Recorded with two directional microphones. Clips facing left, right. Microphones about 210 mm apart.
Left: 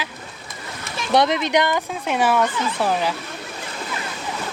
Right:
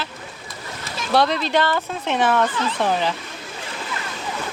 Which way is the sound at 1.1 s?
20° left (ahead or behind).